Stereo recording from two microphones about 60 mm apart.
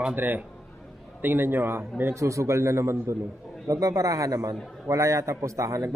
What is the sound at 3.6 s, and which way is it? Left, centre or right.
A man's voice, right.